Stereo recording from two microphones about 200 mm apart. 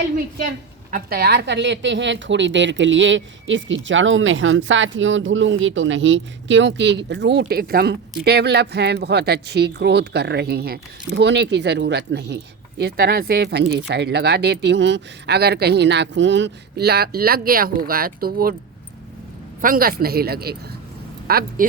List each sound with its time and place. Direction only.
0.9 s a woman's voice: 45° right (ahead or behind)
19.6 s speech: 45° right (ahead or behind)